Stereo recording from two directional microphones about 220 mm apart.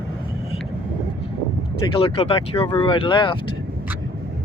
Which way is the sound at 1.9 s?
25° left (ahead or behind).